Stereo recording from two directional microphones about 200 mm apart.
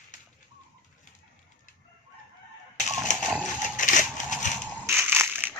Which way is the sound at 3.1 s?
40° left (ahead or behind).